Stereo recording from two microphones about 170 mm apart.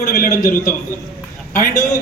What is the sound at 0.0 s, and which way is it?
Speech, 60° left (ahead or behind).